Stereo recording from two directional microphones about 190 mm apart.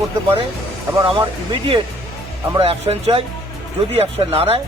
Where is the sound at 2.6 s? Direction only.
30° right (ahead or behind).